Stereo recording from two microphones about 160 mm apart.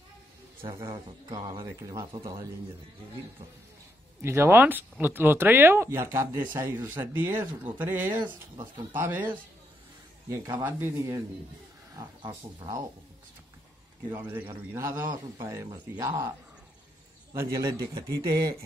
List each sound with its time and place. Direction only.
0.8 s speech: 30° right (ahead or behind)
4.2 s speech: 15° right (ahead or behind)
12.2 s speech: 25° right (ahead or behind)
14.1 s speech: 10° right (ahead or behind)
17.3 s speech: 20° right (ahead or behind)